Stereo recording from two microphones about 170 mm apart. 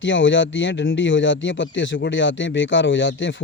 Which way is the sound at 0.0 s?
90° left.